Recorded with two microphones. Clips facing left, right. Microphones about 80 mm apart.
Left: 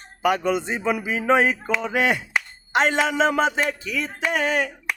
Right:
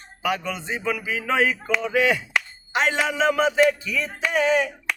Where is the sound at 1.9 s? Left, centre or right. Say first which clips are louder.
Right 1 dB; left.